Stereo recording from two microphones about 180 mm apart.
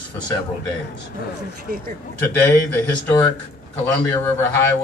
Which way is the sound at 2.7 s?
10° left (ahead or behind).